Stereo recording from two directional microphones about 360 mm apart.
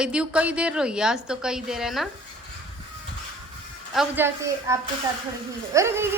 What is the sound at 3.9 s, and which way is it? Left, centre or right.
A woman's voice, centre.